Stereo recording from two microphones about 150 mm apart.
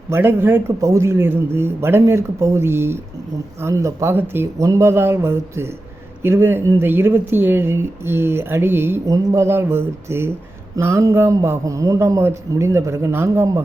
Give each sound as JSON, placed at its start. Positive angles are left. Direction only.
{"t": 0.1, "sound": "a man's voice", "side_deg": -15}